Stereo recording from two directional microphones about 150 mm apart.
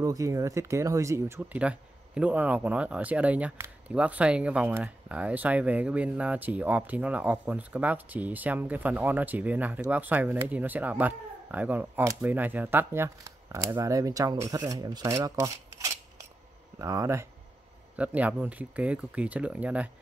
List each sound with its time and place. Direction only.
0.0 s speech: 20° right (ahead or behind)